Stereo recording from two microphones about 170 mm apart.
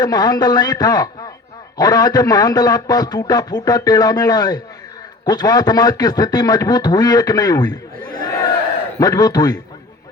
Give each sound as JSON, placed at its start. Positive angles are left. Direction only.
{"t": 0.0, "sound": "a man's voice", "side_deg": 25}
{"t": 9.0, "sound": "a man's voice", "side_deg": 20}